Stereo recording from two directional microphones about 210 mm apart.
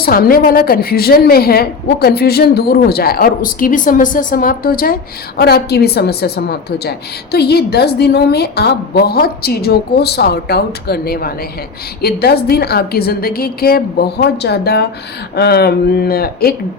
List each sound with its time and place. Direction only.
0.0 s a woman's voice: 45° left (ahead or behind)